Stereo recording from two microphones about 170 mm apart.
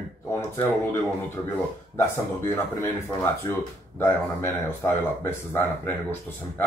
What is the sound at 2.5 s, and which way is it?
Speech, 15° left (ahead or behind).